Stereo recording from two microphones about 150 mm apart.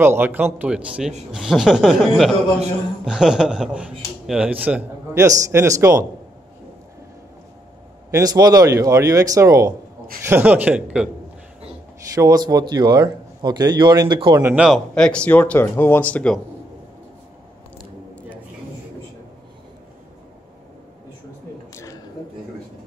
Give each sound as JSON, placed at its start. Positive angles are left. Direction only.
{"t": 0.0, "sound": "a man's voice", "side_deg": -15}
{"t": 8.1, "sound": "a man's voice", "side_deg": -25}
{"t": 12.2, "sound": "speech", "side_deg": -25}
{"t": 14.4, "sound": "speech", "side_deg": -5}
{"t": 15.0, "sound": "speech", "side_deg": 5}
{"t": 21.7, "sound": "a sound", "side_deg": 20}